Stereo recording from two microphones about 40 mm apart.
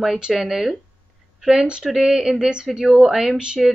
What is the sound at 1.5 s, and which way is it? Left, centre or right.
Speech, centre.